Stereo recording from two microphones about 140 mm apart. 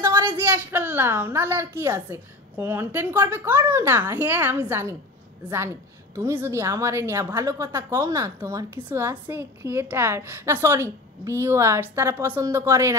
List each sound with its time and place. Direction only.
0.1 s a sound: 35° right (ahead or behind)
0.4 s a woman's voice: 20° right (ahead or behind)
6.1 s a woman's voice: 20° right (ahead or behind)